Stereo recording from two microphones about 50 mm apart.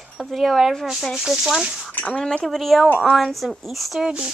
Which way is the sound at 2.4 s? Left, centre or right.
Centre.